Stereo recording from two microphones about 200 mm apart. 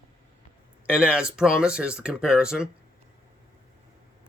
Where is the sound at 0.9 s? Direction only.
5° right (ahead or behind).